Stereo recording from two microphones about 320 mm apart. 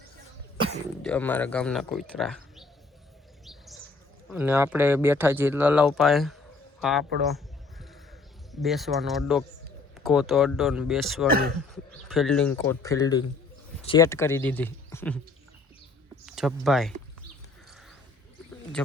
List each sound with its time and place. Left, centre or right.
1.0 s speech: centre
3.4 s bird: centre
4.3 s speech: centre
7.2 s a sound: centre
8.6 s speech: centre
11.3 s speech: right
11.7 s speech: centre
16.2 s speech: centre